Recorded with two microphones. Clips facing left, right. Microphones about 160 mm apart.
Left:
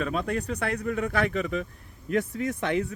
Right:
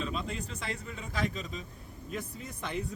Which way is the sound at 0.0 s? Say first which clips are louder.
Left 8 dB; 60° left (ahead or behind).